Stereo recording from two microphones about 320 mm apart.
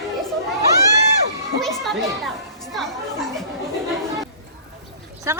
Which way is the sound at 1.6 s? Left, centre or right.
Centre.